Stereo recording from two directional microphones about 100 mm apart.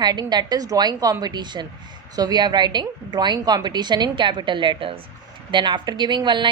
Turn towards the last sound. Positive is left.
turn(degrees=-50)  # may be behind; listen again after turning